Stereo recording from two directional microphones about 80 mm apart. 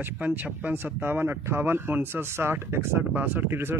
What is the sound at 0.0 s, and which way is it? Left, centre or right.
Speech, right.